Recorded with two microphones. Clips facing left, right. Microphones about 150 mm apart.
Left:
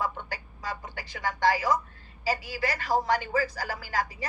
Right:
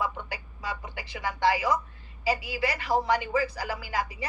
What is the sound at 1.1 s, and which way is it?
A woman's voice, 20° right (ahead or behind).